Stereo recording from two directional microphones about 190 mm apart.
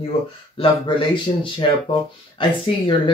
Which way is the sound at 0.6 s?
25° left (ahead or behind).